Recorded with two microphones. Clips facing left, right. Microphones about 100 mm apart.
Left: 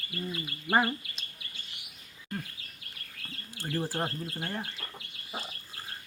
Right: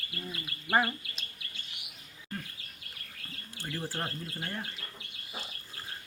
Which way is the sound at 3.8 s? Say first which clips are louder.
Left 5 dB; 20° left (ahead or behind).